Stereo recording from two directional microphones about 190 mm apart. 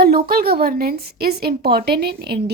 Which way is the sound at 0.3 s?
55° right (ahead or behind).